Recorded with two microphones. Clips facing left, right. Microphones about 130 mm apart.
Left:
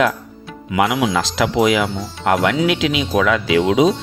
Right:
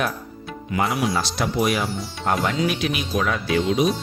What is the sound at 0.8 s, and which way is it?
Speech, 90° left.